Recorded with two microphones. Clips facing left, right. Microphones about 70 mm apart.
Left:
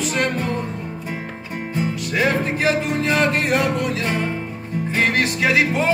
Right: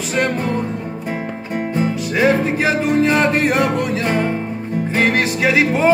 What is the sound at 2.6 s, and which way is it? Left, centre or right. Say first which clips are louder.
Music: right 4 dB; right.